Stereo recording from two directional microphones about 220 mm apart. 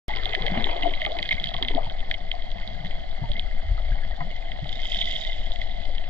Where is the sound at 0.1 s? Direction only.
5° left (ahead or behind).